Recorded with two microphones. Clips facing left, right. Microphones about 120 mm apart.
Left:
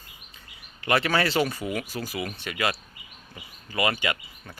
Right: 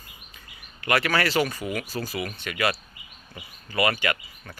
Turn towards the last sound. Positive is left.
turn(degrees=15)  # may be behind; listen again after turning